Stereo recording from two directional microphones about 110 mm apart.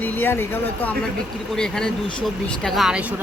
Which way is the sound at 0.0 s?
20° left (ahead or behind).